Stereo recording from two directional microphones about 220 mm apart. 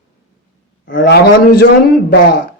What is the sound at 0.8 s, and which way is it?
A man's voice, 55° left (ahead or behind).